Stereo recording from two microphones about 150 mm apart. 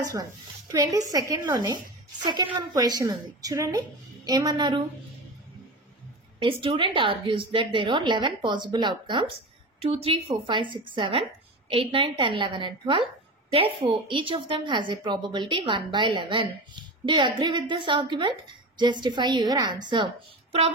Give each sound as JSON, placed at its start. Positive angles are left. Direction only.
{"t": 0.0, "sound": "a woman's voice", "side_deg": -25}
{"t": 6.4, "sound": "a woman's voice", "side_deg": -35}